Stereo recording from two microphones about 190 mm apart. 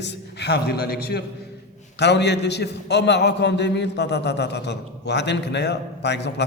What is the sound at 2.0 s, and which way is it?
A man's voice, 65° left (ahead or behind).